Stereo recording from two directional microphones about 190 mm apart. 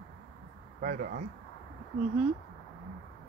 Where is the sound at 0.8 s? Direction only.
55° right (ahead or behind).